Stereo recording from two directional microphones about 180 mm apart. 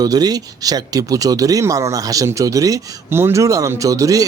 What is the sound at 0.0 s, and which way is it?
Speech, 20° right (ahead or behind).